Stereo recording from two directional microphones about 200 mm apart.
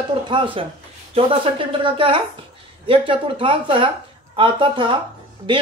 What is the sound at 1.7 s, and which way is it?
Speech, 25° right (ahead or behind).